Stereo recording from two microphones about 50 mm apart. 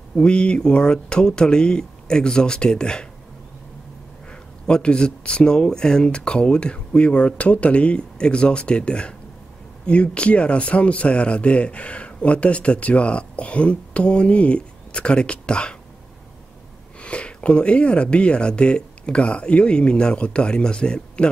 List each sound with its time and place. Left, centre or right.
0.2 s speech: left
4.3 s speech: centre
17.0 s speech: left